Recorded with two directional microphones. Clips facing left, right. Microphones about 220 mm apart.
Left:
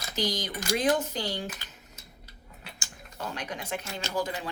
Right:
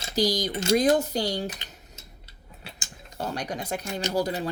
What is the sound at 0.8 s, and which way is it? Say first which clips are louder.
Speech: right 3 dB; 40° right (ahead or behind).